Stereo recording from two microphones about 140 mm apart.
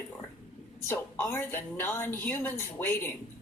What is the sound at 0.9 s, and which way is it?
A woman's voice, 20° left (ahead or behind).